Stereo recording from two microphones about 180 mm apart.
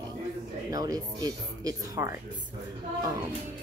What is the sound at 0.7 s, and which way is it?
Speech, 20° right (ahead or behind).